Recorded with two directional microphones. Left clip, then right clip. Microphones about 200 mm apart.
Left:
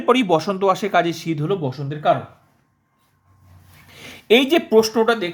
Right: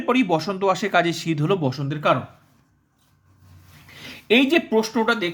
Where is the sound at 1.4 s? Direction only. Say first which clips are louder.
Right 2 dB; 20° right (ahead or behind).